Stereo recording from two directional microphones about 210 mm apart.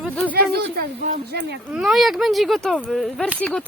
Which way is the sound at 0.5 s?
50° right (ahead or behind).